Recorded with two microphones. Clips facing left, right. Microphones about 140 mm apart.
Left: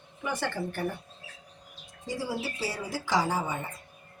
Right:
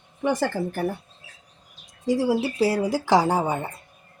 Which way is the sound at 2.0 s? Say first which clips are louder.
Right 11 dB; 90° right.